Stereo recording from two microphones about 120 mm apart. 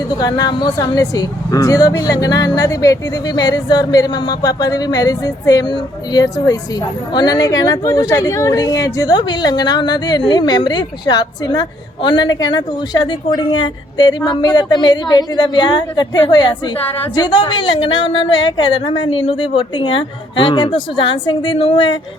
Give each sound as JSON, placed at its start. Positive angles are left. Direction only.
{"t": 0.2, "sound": "a woman's voice", "side_deg": 35}